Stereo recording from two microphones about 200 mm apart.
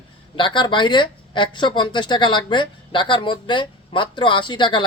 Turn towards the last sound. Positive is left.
turn(degrees=25)  # may be behind; listen again after turning